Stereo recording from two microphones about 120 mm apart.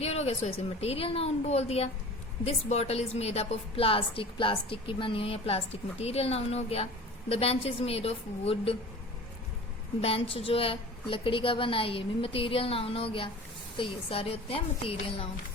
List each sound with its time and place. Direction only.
0.0 s a woman's voice: 60° left (ahead or behind)
10.0 s a woman's voice: 55° left (ahead or behind)